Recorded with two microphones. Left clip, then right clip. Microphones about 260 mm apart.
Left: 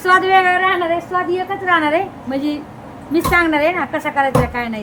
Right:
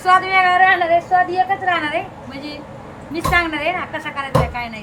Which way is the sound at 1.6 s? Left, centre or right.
Centre.